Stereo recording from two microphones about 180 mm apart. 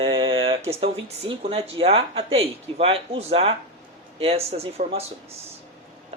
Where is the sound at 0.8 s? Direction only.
30° right (ahead or behind).